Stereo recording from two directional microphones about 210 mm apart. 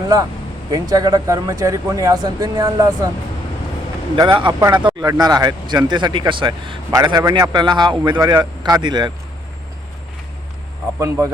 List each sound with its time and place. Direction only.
0.7 s speech: 20° right (ahead or behind)
4.1 s speech: 25° right (ahead or behind)